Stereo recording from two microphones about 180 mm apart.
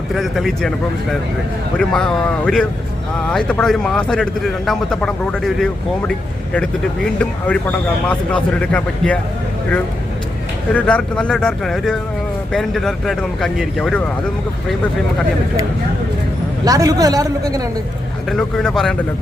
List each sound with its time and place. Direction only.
0.1 s a man's voice: centre (ahead or behind)
1.8 s a man's voice: 5° left (ahead or behind)
10.7 s a man's voice: 5° left (ahead or behind)
16.6 s a man's voice: 20° right (ahead or behind)
18.3 s a man's voice: 5° left (ahead or behind)